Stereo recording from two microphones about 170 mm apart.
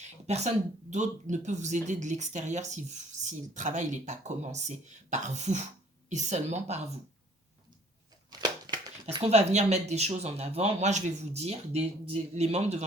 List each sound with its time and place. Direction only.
0.0 s speech: 40° right (ahead or behind)
8.3 s a sound: 25° right (ahead or behind)
9.0 s speech: 35° right (ahead or behind)